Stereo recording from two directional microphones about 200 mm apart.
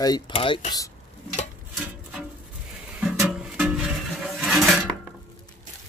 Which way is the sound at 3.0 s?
5° right (ahead or behind).